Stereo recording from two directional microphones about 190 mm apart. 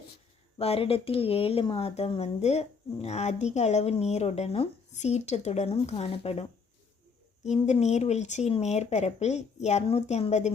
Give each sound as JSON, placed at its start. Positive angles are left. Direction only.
{"t": 0.6, "sound": "speech", "side_deg": 30}
{"t": 7.4, "sound": "speech", "side_deg": 35}